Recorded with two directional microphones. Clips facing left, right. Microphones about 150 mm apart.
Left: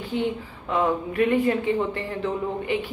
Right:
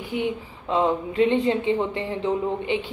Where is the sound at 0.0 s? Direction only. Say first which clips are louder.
Even; 15° right (ahead or behind).